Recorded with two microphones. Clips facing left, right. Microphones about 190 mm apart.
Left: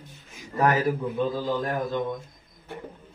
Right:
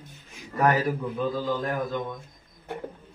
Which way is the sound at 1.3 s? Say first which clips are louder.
Left 1 dB; 25° left (ahead or behind).